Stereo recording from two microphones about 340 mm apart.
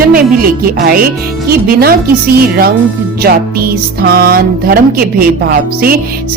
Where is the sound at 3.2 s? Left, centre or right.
Right.